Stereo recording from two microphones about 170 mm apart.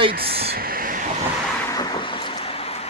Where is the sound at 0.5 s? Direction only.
60° right (ahead or behind).